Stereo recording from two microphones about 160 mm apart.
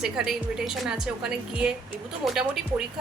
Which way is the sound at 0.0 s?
5° right (ahead or behind).